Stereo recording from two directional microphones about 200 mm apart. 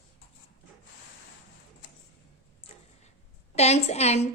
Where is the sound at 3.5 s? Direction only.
35° left (ahead or behind).